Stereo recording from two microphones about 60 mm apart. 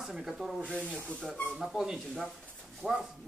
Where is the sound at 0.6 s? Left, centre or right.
Centre.